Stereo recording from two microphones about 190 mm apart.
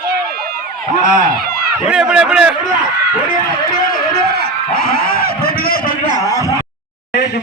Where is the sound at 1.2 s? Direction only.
50° right (ahead or behind).